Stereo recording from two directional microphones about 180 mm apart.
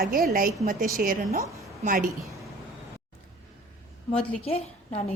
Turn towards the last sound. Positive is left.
turn(degrees=35)  # may be behind; listen again after turning